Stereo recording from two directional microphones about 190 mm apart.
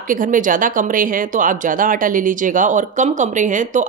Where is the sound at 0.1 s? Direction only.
45° right (ahead or behind).